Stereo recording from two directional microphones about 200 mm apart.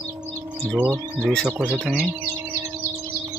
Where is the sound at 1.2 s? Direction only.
5° left (ahead or behind).